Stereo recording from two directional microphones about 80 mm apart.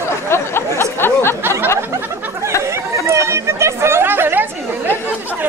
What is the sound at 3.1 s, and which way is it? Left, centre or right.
Chatter, right.